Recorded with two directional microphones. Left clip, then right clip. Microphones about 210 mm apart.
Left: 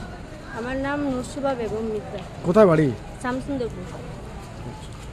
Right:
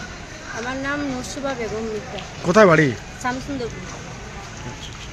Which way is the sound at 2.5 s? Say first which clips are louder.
Right 3 dB; 5° right (ahead or behind).